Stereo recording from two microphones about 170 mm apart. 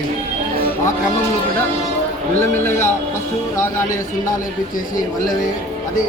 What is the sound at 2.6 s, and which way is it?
Speech, 15° left (ahead or behind).